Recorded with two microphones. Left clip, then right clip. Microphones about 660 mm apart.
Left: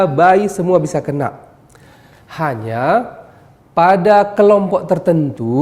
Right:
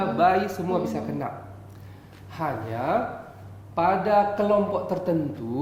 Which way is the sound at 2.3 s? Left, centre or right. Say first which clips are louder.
Left 10 dB; left.